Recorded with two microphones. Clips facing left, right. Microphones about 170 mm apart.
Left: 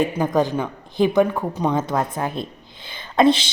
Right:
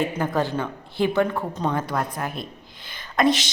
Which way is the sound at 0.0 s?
15° left (ahead or behind).